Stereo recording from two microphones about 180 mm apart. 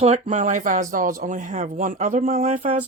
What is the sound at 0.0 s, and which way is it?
Speech, 40° right (ahead or behind).